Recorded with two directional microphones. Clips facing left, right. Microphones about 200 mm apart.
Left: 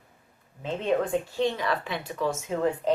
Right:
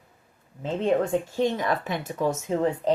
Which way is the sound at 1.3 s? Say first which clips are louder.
Right 2 dB; 45° right (ahead or behind).